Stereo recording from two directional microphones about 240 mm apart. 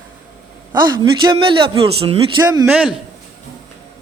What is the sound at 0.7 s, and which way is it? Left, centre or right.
A man's voice, centre.